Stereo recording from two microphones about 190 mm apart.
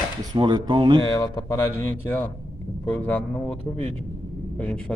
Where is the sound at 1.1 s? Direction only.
20° left (ahead or behind).